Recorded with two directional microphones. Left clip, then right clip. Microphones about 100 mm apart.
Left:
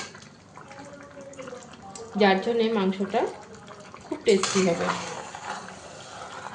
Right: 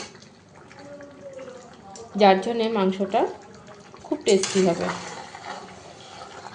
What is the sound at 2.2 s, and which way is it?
A woman's voice, 50° right (ahead or behind).